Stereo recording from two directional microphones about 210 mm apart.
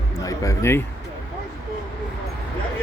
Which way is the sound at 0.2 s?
15° left (ahead or behind).